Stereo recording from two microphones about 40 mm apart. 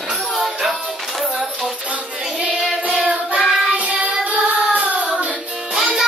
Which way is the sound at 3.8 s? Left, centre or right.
Right.